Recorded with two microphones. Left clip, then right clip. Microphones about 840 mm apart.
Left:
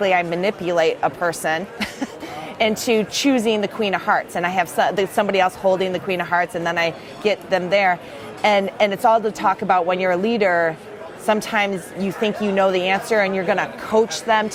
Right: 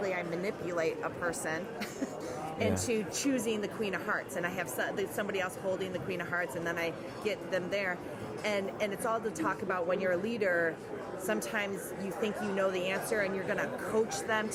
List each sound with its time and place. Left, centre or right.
0.0 s a woman's voice: left